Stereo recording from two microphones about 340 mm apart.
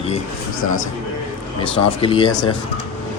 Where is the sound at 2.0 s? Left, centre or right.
Centre.